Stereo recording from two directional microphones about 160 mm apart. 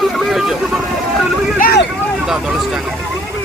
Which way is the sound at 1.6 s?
70° left (ahead or behind).